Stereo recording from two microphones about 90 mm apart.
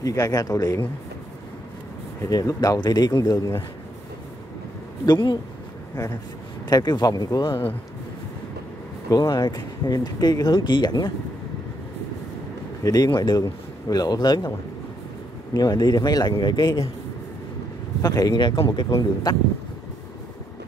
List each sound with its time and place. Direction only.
0.0 s speech: 40° left (ahead or behind)
2.2 s speech: 40° left (ahead or behind)
5.0 s speech: 55° left (ahead or behind)
6.7 s speech: 50° left (ahead or behind)
7.4 s speech: 80° left
9.3 s speech: 50° left (ahead or behind)
12.8 s speech: 45° left (ahead or behind)
13.1 s speech: 60° left (ahead or behind)
13.4 s speech: 45° left (ahead or behind)
15.5 s speech: 45° left (ahead or behind)
18.0 s speech: 45° left (ahead or behind); by 18.7 s 65° left (ahead or behind)
18.7 s speech: 50° left (ahead or behind)